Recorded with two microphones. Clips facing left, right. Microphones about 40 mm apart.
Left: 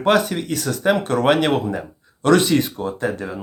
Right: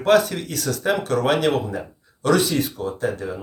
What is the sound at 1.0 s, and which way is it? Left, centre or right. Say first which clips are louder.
Speech: left 2 dB; left.